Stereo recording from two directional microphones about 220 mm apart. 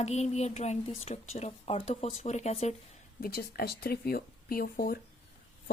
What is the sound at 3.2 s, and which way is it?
Speech, 45° left (ahead or behind).